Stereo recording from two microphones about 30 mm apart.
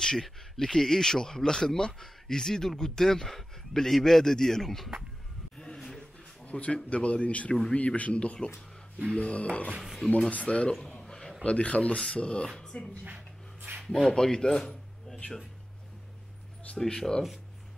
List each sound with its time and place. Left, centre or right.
0.0 s speech: left
6.4 s speech: left
10.0 s speech: left
10.3 s speech: left
10.8 s a sound: left
11.1 s a sound: centre
11.4 s speech: left
13.6 s a sound: right
13.8 s speech: left
16.7 s speech: left